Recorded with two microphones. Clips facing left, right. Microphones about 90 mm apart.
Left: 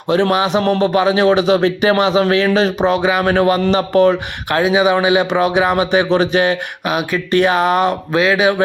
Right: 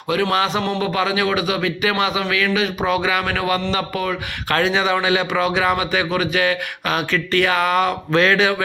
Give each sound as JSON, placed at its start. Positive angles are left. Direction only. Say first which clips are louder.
{"t": 0.3, "sound": "speech", "louder": "left 5 dB", "side_deg": 20}
{"t": 4.4, "sound": "speech", "louder": "left 5 dB", "side_deg": 15}
{"t": 8.2, "sound": "speech", "louder": "left 2 dB", "side_deg": 10}